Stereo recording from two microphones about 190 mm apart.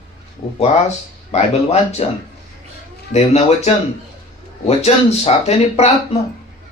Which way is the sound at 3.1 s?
35° left (ahead or behind).